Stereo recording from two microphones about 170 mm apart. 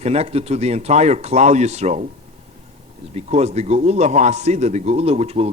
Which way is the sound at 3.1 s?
40° right (ahead or behind).